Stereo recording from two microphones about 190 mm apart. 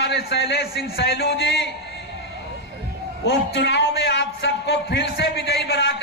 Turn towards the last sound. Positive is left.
turn(degrees=60)  # may be behind; listen again after turning